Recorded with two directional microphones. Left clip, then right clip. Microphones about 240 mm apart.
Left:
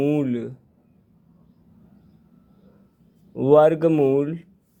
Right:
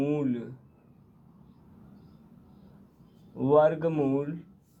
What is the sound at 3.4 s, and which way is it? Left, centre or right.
Speech, left.